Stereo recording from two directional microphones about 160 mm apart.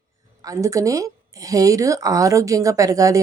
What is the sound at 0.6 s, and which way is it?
A woman's voice, 20° right (ahead or behind).